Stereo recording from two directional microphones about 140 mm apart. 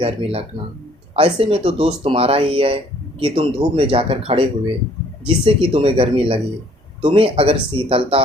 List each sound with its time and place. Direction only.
0.0 s speech: 40° right (ahead or behind)